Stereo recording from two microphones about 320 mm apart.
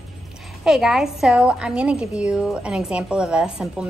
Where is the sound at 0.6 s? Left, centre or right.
Centre.